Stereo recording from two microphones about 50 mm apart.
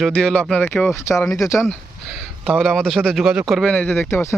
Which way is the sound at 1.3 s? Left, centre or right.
Left.